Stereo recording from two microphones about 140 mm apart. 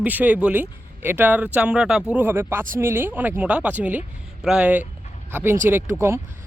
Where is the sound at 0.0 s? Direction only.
10° right (ahead or behind).